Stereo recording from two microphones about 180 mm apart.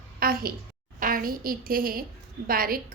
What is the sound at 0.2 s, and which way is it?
A woman's voice, 55° right (ahead or behind).